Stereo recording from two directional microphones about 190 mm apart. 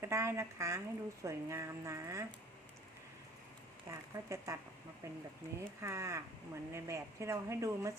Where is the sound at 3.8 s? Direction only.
15° right (ahead or behind).